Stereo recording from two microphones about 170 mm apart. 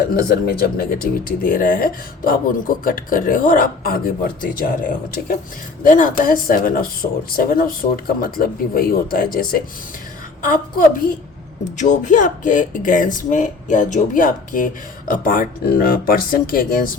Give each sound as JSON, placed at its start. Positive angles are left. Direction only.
{"t": 0.1, "sound": "speech", "side_deg": 65}